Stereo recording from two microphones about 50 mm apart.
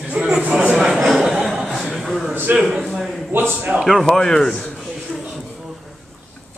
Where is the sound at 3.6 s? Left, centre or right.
Right.